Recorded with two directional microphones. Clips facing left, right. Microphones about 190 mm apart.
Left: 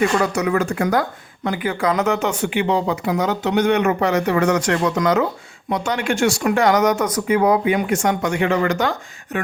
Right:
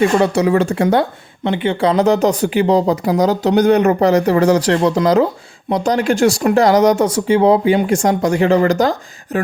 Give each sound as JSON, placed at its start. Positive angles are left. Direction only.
{"t": 0.0, "sound": "speech", "side_deg": -30}